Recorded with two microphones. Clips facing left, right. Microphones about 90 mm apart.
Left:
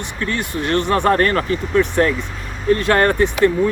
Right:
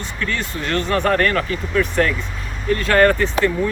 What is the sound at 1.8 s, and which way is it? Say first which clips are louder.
Speech: left 2 dB; 25° left (ahead or behind).